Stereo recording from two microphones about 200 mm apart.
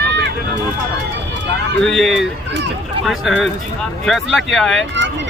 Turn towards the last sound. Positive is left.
turn(degrees=0)  # may be behind; listen again after turning